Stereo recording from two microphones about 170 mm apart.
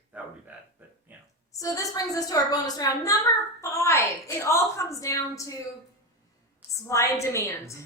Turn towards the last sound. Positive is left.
turn(degrees=15)  # may be behind; listen again after turning